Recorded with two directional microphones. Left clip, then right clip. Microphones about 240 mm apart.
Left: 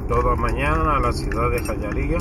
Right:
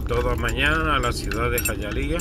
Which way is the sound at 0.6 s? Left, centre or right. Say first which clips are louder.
Left 1 dB; right.